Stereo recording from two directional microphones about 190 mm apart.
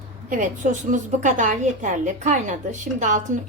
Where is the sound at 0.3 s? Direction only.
40° right (ahead or behind).